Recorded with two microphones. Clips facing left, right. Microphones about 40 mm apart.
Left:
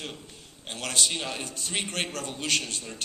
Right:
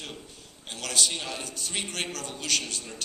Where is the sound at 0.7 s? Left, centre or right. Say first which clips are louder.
Left 1 dB; left.